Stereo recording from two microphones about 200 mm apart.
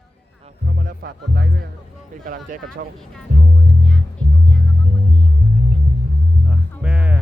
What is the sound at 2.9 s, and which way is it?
Speech, 5° left (ahead or behind).